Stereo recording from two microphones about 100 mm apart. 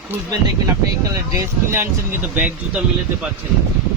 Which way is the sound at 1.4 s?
25° right (ahead or behind).